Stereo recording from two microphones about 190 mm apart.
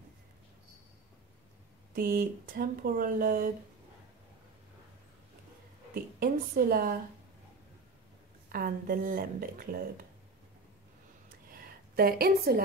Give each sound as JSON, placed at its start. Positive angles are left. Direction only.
{"t": 2.0, "sound": "speech", "side_deg": -50}
{"t": 6.1, "sound": "speech", "side_deg": -50}
{"t": 8.5, "sound": "speech", "side_deg": -50}
{"t": 11.5, "sound": "a sound", "side_deg": -50}